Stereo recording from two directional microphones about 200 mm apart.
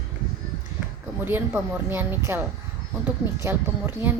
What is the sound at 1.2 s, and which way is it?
Speech, 10° right (ahead or behind).